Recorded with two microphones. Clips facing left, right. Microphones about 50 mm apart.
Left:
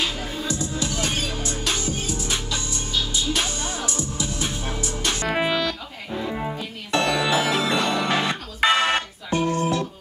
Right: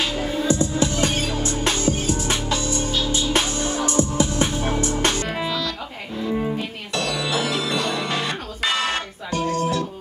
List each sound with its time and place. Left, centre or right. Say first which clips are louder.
0.2 s music: right 7 dB; right
5.2 s music: left 3 dB; left
6.1 s music: right 3 dB; centre
6.9 s music: left 4 dB; left